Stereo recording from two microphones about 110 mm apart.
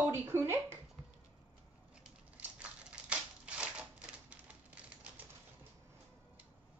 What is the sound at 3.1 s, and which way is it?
Typewriter, 10° right (ahead or behind).